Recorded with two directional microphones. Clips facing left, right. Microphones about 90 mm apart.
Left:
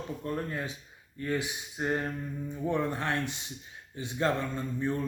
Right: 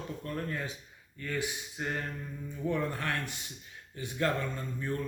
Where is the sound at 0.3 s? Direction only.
20° left (ahead or behind).